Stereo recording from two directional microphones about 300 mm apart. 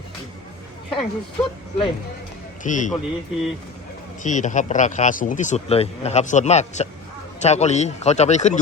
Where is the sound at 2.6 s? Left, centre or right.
Left.